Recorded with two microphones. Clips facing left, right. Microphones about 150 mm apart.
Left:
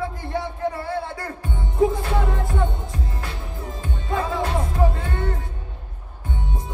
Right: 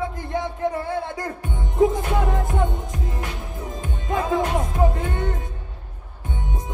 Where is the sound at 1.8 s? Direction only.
20° right (ahead or behind).